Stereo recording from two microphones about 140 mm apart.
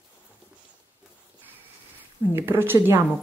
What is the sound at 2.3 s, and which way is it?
Speech, 15° right (ahead or behind).